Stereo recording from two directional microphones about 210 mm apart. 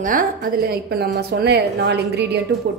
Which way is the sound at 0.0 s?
45° right (ahead or behind).